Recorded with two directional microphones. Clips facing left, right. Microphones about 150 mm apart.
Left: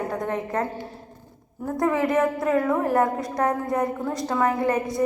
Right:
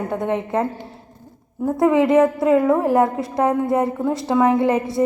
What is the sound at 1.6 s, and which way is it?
A woman's voice, 25° right (ahead or behind).